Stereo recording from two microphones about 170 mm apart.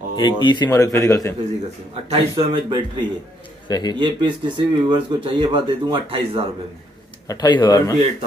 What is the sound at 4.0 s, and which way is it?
Speech, 30° right (ahead or behind).